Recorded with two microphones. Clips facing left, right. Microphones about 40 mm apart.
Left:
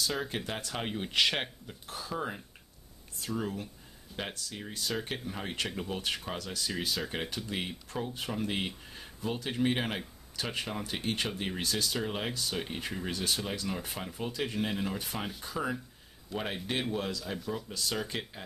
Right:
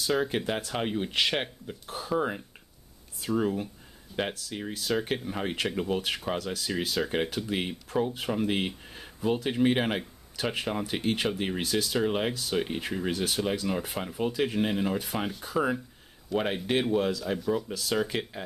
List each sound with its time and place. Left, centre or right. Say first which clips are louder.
0.1 s speech: right 7 dB; centre
1.9 s speech: right 7 dB; centre